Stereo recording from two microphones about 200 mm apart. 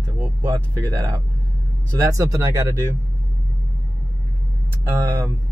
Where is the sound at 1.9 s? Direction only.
15° right (ahead or behind).